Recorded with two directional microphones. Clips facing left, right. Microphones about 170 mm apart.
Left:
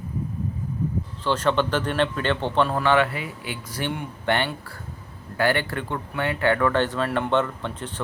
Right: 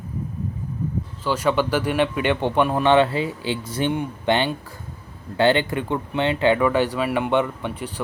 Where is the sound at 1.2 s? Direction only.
10° right (ahead or behind).